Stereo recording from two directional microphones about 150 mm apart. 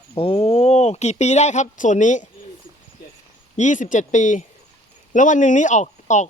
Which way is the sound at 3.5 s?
55° left (ahead or behind).